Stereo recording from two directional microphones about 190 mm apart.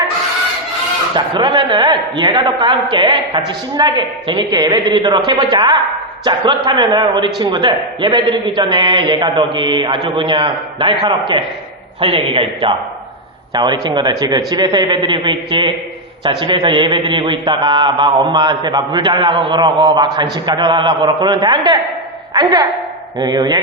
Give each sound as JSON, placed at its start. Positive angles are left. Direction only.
{"t": 1.1, "sound": "a man's voice", "side_deg": -25}
{"t": 13.5, "sound": "a man's voice", "side_deg": -20}